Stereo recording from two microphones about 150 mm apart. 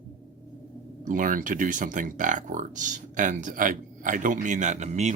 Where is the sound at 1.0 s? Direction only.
60° right (ahead or behind).